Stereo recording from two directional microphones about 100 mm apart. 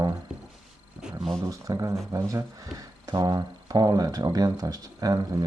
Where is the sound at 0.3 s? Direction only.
10° right (ahead or behind).